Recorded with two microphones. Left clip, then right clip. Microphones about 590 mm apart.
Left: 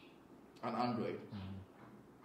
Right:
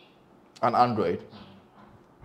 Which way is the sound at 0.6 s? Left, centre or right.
Right.